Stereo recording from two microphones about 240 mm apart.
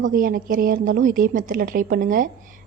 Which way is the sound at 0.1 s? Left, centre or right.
Right.